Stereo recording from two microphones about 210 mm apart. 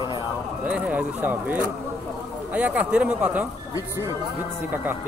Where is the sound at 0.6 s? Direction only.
5° right (ahead or behind).